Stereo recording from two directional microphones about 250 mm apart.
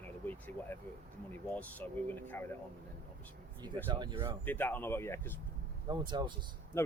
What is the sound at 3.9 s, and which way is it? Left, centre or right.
Speech, centre.